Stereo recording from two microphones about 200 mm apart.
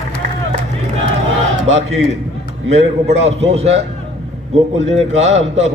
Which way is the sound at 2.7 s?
35° right (ahead or behind).